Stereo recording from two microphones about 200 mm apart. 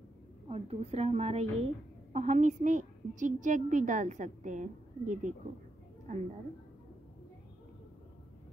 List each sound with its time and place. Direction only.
0.5 s a woman's voice: 30° right (ahead or behind)